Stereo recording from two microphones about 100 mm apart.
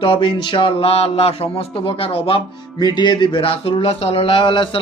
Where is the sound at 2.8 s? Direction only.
45° left (ahead or behind).